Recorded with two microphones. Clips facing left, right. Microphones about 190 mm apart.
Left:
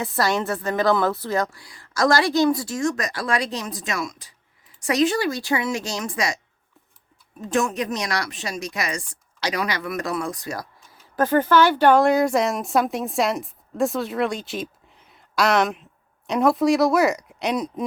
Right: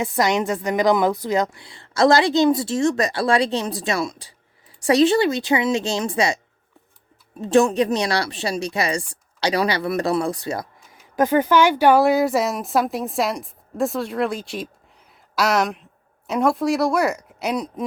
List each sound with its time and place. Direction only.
0.0 s a woman's voice: 20° right (ahead or behind)
7.4 s speech: 30° right (ahead or behind)
11.2 s speech: 15° right (ahead or behind)